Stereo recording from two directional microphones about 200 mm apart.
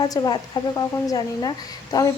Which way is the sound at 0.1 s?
20° left (ahead or behind).